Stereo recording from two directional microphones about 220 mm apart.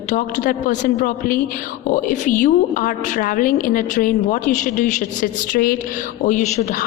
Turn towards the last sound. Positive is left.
turn(degrees=35)  # may be behind; listen again after turning